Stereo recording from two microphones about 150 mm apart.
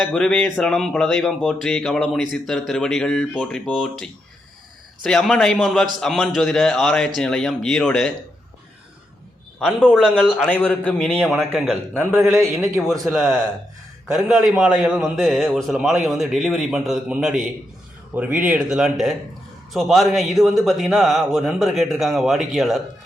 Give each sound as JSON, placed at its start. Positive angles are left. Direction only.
{"t": 0.0, "sound": "a man's voice", "side_deg": 5}
{"t": 9.6, "sound": "a man's voice", "side_deg": 0}
{"t": 11.9, "sound": "speech", "side_deg": -15}
{"t": 13.1, "sound": "a man's voice", "side_deg": 0}